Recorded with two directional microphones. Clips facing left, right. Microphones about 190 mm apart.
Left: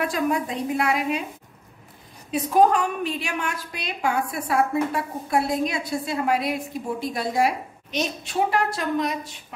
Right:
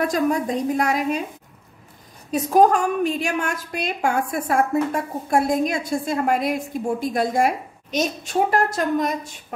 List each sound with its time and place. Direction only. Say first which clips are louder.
0.0 s a woman's voice: right 3 dB; 40° right (ahead or behind)
2.3 s a woman's voice: right 2 dB; 45° right (ahead or behind)